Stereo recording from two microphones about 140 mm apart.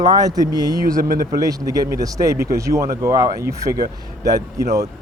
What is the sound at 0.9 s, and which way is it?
Speech, 90° right.